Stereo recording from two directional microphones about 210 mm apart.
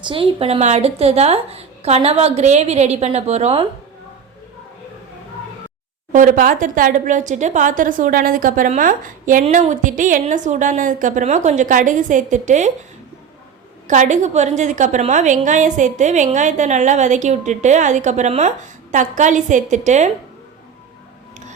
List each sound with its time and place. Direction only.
0.0 s a woman's voice: 25° right (ahead or behind)
6.1 s a woman's voice: 40° right (ahead or behind)
13.8 s a woman's voice: 35° right (ahead or behind)